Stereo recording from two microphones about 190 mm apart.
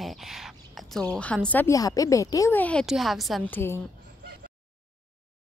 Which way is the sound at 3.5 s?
10° left (ahead or behind).